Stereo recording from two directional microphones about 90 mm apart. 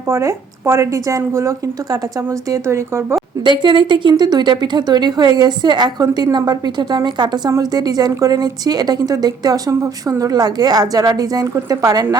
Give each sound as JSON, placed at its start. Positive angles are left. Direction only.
{"t": 0.1, "sound": "speech", "side_deg": -35}
{"t": 3.4, "sound": "a woman's voice", "side_deg": -60}